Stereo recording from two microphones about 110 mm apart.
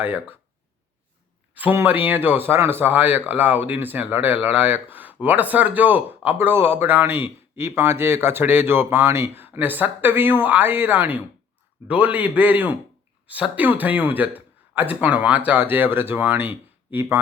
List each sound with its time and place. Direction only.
0.0 s speech: 20° right (ahead or behind)
1.5 s a man's voice: 20° right (ahead or behind)